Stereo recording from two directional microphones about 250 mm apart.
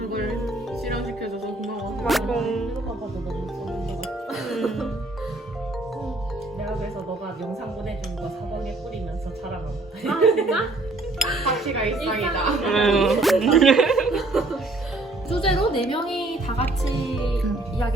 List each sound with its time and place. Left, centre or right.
0.3 s music: centre
4.3 s music: centre
10.0 s speech: centre
15.4 s music: left
16.0 s music: centre